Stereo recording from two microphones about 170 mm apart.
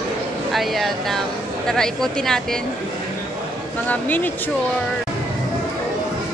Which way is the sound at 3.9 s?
10° left (ahead or behind).